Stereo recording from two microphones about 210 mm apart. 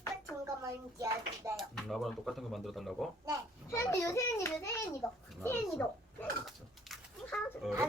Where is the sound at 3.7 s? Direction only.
15° left (ahead or behind).